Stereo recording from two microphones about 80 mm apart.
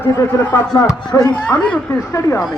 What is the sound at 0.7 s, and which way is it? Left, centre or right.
A man's voice, left.